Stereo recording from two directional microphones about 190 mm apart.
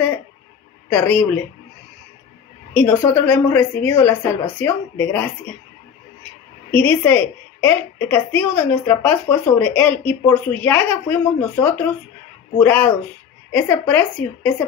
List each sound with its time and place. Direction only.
0.9 s a woman's voice: 10° left (ahead or behind)
2.7 s a woman's voice: 10° left (ahead or behind)
6.7 s a woman's voice: 10° left (ahead or behind)